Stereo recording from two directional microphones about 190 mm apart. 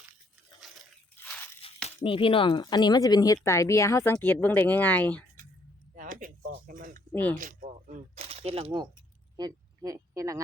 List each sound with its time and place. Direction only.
1.1 s crushing: 10° left (ahead or behind)
2.0 s speech: 25° left (ahead or behind); by 5.2 s 10° left (ahead or behind)
5.9 s speech: 45° right (ahead or behind)
7.1 s speech: 10° left (ahead or behind)
7.3 s speech: 45° right (ahead or behind); by 10.4 s 15° right (ahead or behind)